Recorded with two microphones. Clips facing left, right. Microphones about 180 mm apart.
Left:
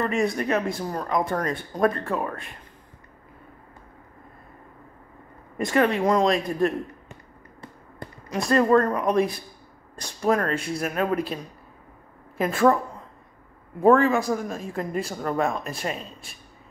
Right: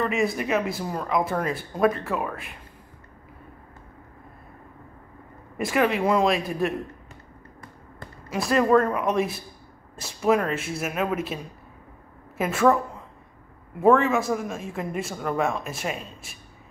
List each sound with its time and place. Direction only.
0.0 s speech: centre (ahead or behind)
5.6 s speech: 5° right (ahead or behind)
8.3 s speech: 5° right (ahead or behind)
12.4 s speech: centre (ahead or behind)
13.7 s speech: centre (ahead or behind)